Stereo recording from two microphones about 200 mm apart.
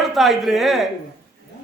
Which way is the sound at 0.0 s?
Centre (ahead or behind).